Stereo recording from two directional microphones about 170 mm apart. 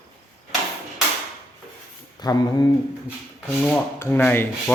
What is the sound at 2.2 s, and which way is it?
Speech, 25° left (ahead or behind).